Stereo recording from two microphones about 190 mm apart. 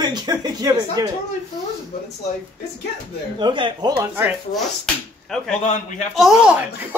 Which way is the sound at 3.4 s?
25° right (ahead or behind).